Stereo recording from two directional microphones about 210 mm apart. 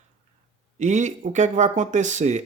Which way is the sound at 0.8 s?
35° right (ahead or behind).